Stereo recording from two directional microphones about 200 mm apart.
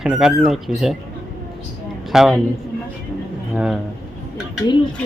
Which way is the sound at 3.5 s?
Centre (ahead or behind).